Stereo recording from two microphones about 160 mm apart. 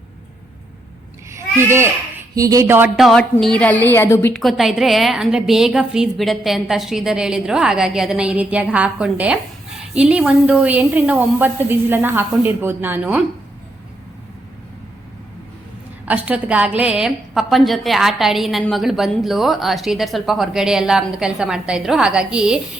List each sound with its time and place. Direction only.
1.3 s a sound: 15° right (ahead or behind)
2.3 s a woman's voice: 20° right (ahead or behind)
2.9 s a woman's voice: centre (ahead or behind)
4.4 s a woman's voice: centre (ahead or behind)
16.0 s a woman's voice: 10° right (ahead or behind)